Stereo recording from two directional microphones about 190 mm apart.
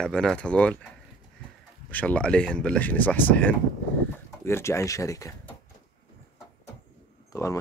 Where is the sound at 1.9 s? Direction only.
5° left (ahead or behind).